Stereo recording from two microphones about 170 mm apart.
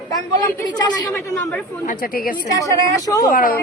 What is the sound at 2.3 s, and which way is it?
Speech, 20° left (ahead or behind).